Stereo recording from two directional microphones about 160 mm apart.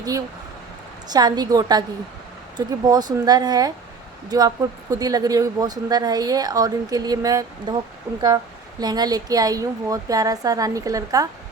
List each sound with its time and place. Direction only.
1.0 s speech: 25° right (ahead or behind)
8.8 s speech: 25° right (ahead or behind)